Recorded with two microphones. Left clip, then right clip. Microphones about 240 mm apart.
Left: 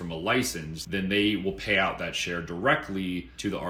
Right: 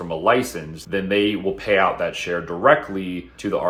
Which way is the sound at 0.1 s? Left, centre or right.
Centre.